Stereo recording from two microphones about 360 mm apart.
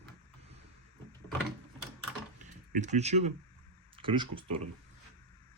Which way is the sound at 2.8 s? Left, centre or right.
Centre.